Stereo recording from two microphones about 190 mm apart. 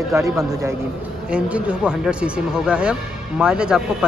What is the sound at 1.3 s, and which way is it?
Speech, 5° right (ahead or behind).